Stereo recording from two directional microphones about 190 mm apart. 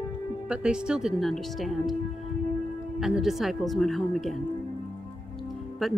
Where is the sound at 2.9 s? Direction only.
Centre (ahead or behind).